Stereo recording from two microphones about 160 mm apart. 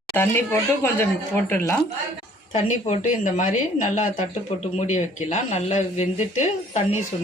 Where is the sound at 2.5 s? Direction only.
50° left (ahead or behind).